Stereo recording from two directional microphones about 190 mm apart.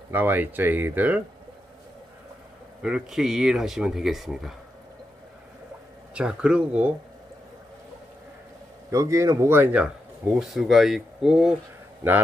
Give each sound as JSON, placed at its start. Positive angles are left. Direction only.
{"t": 0.1, "sound": "speech", "side_deg": -10}
{"t": 2.8, "sound": "speech", "side_deg": -5}
{"t": 6.1, "sound": "speech", "side_deg": -5}
{"t": 8.9, "sound": "speech", "side_deg": -15}